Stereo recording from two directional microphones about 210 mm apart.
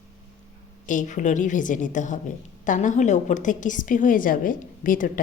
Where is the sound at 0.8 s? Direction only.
35° left (ahead or behind).